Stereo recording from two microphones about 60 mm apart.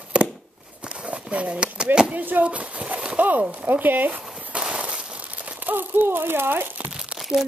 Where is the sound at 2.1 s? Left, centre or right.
Right.